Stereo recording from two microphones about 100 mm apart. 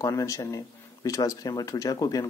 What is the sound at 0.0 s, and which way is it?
Speech, 35° left (ahead or behind).